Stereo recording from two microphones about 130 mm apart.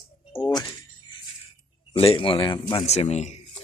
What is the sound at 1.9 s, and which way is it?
Speech, 45° left (ahead or behind).